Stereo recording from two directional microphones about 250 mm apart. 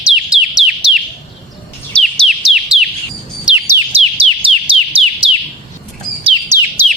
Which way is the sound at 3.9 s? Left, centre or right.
Right.